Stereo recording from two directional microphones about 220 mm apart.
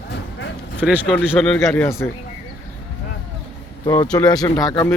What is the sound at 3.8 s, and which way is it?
Speech, 20° left (ahead or behind).